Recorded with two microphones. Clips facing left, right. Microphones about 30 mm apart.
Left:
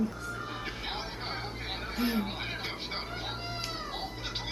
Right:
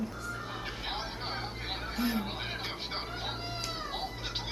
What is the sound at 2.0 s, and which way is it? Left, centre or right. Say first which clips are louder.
Speech: left 2 dB; centre.